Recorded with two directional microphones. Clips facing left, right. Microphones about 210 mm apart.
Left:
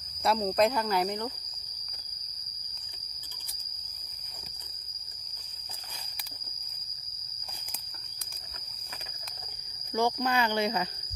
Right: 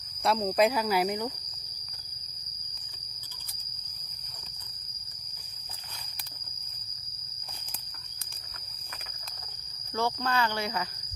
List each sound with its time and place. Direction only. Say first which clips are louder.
0.2 s speech: right 1 dB; centre (ahead or behind)
9.9 s speech: left 2 dB; 15° left (ahead or behind)